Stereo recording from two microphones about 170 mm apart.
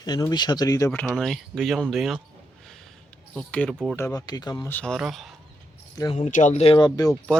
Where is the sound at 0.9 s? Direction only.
5° left (ahead or behind).